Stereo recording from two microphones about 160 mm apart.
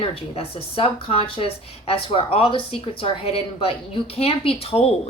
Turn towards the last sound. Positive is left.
turn(degrees=40)  # may be behind; listen again after turning